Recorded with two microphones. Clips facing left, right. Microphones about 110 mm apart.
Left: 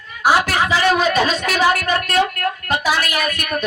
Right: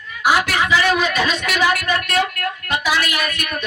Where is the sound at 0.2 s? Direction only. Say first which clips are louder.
Left 2 dB; 35° left (ahead or behind).